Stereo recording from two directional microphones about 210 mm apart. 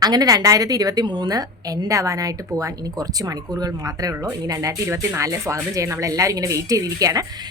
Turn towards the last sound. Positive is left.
turn(degrees=-20)  # may be behind; listen again after turning